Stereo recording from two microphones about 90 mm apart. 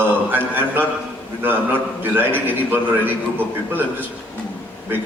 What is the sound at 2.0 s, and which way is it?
A man's voice, 20° right (ahead or behind).